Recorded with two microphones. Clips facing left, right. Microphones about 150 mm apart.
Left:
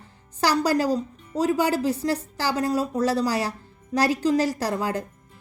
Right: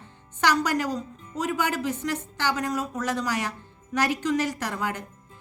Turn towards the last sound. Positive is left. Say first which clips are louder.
# left 4 dB
turn(degrees=35)  # may be behind; listen again after turning